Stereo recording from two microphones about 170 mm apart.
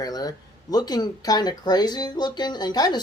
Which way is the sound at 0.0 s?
20° left (ahead or behind).